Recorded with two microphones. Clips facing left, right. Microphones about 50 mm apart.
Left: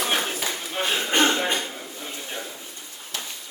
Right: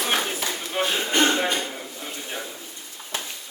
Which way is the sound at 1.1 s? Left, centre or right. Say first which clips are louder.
Left 1 dB; left.